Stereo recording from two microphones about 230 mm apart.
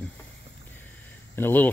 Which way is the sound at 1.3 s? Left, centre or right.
Centre.